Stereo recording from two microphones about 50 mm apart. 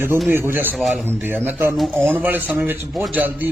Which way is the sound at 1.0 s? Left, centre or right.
Right.